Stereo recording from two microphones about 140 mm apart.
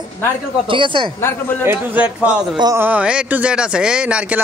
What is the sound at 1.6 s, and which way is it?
Speech, 10° right (ahead or behind).